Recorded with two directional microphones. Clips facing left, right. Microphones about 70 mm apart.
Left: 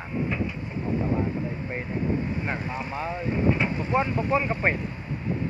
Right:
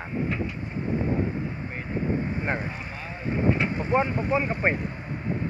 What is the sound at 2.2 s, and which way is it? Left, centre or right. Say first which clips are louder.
Speech: right 1 dB; right.